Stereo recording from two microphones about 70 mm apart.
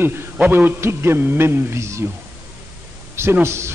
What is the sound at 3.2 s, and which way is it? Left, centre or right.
Speech, right.